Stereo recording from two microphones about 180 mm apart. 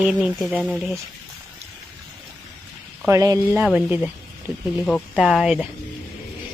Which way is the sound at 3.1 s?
20° right (ahead or behind).